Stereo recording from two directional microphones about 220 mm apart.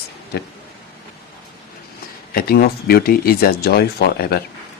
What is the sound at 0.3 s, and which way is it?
Speech, 45° left (ahead or behind).